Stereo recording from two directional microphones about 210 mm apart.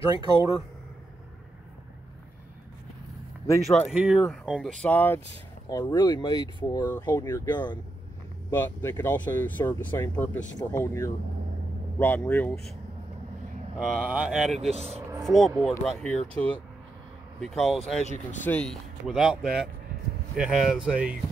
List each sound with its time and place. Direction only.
3.4 s speech: 10° left (ahead or behind)
3.9 s speech: centre (ahead or behind); by 7.8 s 20° left (ahead or behind)
8.5 s speech: 10° left (ahead or behind)
13.7 s speech: centre (ahead or behind)
14.6 s speech: 30° right (ahead or behind)
15.2 s speech: centre (ahead or behind)